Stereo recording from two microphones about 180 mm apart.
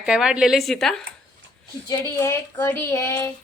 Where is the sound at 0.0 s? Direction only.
5° right (ahead or behind).